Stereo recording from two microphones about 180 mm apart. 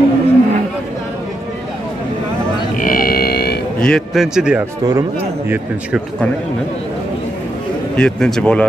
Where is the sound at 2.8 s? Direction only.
50° left (ahead or behind).